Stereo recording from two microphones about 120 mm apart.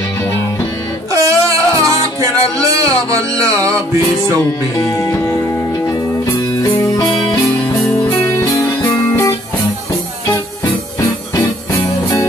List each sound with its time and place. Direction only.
1.1 s music: 25° right (ahead or behind)
4.7 s speech: 25° left (ahead or behind)
5.9 s music: 25° left (ahead or behind)
8.1 s music: 25° left (ahead or behind)